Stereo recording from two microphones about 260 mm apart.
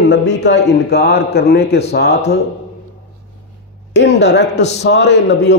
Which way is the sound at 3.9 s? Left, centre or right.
Left.